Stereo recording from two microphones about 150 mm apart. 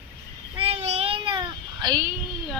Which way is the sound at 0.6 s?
45° right (ahead or behind).